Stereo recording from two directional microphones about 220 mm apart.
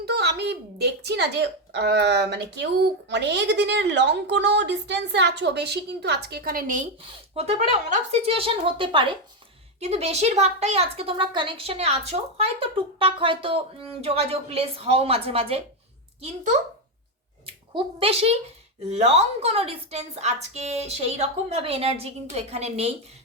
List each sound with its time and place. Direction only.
0.0 s a woman's voice: 50° right (ahead or behind)
7.3 s a woman's voice: 25° right (ahead or behind)